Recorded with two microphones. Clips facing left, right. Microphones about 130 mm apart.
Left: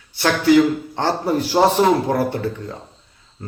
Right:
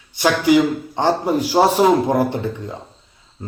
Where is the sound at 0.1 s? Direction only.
15° right (ahead or behind).